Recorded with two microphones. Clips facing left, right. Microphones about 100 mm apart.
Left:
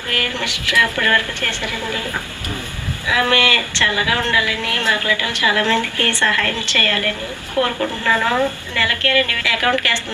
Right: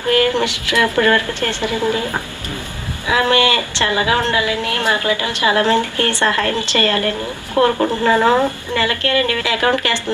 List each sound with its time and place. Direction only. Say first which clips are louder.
0.1 s a woman's voice: right 10 dB; 25° right (ahead or behind)
3.1 s a woman's voice: right 3 dB; 20° right (ahead or behind)